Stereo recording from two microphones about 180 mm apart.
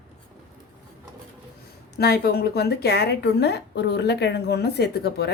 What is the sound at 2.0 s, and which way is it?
A woman's voice, 60° left (ahead or behind).